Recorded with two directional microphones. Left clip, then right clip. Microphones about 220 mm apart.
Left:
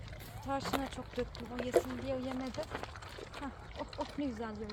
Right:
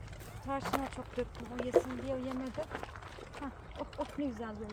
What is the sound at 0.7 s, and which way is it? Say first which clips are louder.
Speech: right 4 dB; 5° right (ahead or behind).